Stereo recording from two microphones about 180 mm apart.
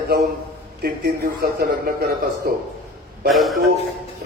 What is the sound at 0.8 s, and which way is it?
A man's voice, 55° right (ahead or behind).